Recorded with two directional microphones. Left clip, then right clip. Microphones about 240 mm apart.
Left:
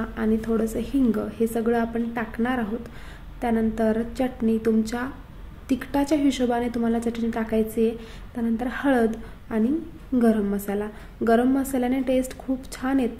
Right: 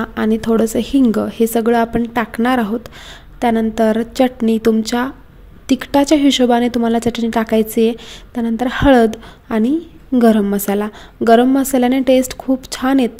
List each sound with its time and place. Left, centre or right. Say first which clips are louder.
0.0 s a woman's voice: right 8 dB; right